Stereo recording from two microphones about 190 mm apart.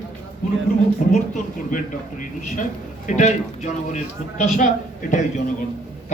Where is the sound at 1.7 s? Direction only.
45° left (ahead or behind).